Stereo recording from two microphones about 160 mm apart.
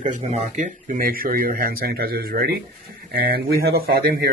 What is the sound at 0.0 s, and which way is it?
Speech, 50° right (ahead or behind).